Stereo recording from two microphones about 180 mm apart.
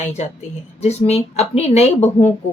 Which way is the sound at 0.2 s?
40° left (ahead or behind).